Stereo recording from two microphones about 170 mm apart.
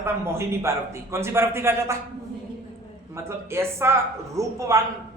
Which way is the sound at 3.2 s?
15° right (ahead or behind).